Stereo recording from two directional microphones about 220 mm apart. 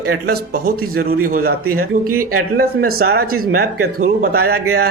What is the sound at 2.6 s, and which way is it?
A man's voice, 45° right (ahead or behind).